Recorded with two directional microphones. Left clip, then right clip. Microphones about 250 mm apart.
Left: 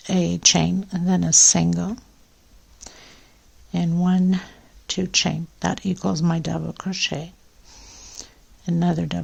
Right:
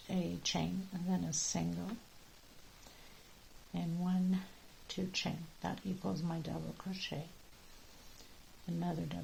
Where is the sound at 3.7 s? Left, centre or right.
Left.